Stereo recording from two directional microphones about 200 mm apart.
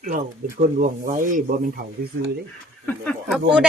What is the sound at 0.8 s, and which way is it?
Speech, 40° right (ahead or behind).